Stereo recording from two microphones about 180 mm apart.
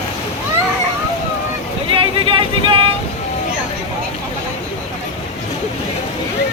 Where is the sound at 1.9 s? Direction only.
30° right (ahead or behind).